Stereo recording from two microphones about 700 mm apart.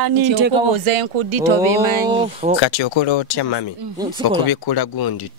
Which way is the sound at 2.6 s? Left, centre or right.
Left.